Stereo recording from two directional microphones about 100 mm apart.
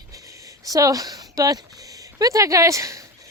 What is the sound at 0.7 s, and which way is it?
A woman's voice, 35° right (ahead or behind).